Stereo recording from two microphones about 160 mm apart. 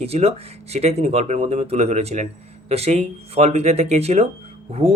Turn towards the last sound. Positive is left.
turn(degrees=-40)  # may be behind; listen again after turning